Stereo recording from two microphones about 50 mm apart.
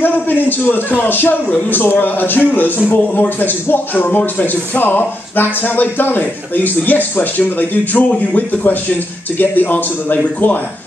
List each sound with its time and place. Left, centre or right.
0.0 s speech: left